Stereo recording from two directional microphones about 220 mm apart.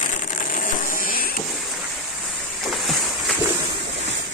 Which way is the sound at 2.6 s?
Centre (ahead or behind).